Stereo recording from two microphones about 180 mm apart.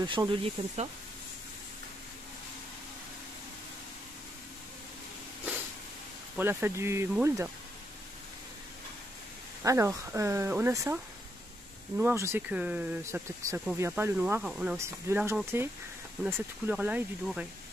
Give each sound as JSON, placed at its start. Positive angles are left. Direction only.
{"t": 0.0, "sound": "speech", "side_deg": -25}
{"t": 6.3, "sound": "speech", "side_deg": -10}
{"t": 9.6, "sound": "speech", "side_deg": -15}
{"t": 12.0, "sound": "speech", "side_deg": -15}